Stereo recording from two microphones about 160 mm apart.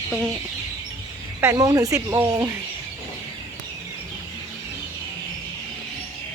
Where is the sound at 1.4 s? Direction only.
20° right (ahead or behind).